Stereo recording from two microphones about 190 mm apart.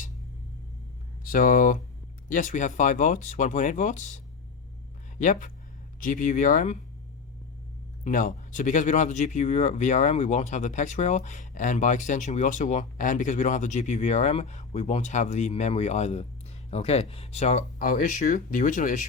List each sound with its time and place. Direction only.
1.2 s speech: 45° left (ahead or behind)
5.2 s speech: 45° left (ahead or behind)
8.0 s speech: 45° left (ahead or behind)